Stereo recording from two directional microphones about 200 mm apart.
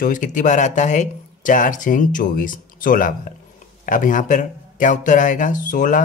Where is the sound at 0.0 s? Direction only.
40° left (ahead or behind).